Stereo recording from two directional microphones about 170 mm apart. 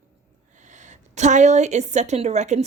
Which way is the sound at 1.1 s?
45° right (ahead or behind).